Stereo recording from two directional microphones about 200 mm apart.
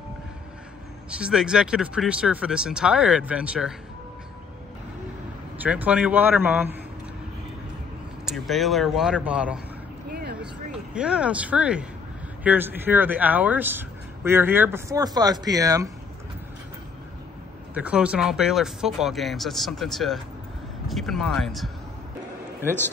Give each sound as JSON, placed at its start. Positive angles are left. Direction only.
{"t": 1.1, "sound": "speech", "side_deg": -5}
{"t": 5.6, "sound": "speech", "side_deg": -5}
{"t": 8.3, "sound": "speech", "side_deg": 0}
{"t": 10.1, "sound": "a sound", "side_deg": -55}
{"t": 10.7, "sound": "speech", "side_deg": -5}
{"t": 17.7, "sound": "speech", "side_deg": -5}